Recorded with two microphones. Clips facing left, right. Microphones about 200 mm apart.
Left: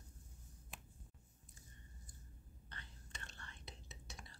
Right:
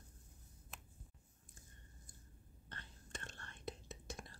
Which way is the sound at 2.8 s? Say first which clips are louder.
Right 7 dB; 50° right (ahead or behind).